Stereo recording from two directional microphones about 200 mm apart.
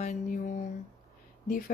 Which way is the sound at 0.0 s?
35° left (ahead or behind).